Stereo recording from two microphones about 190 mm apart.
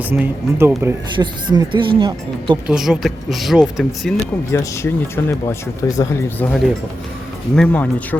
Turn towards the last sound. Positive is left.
turn(degrees=5)  # may be behind; listen again after turning